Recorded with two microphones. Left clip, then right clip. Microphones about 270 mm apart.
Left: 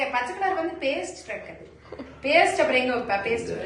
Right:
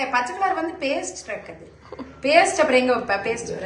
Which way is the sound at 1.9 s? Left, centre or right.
Centre.